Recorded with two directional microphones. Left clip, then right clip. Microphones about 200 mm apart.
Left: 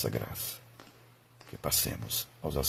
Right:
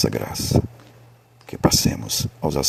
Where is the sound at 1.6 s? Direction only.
40° right (ahead or behind).